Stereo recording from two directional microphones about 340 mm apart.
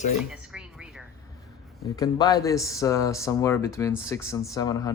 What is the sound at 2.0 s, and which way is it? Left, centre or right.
A man's voice, centre.